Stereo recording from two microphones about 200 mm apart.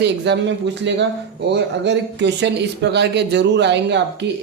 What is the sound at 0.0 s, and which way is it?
Speech, 60° right (ahead or behind).